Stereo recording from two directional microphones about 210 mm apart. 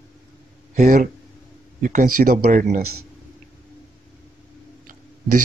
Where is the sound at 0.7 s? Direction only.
40° right (ahead or behind).